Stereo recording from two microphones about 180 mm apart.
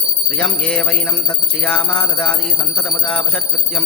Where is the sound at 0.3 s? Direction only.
5° left (ahead or behind).